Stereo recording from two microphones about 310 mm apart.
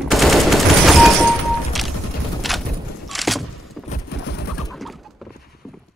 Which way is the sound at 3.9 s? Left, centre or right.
Left.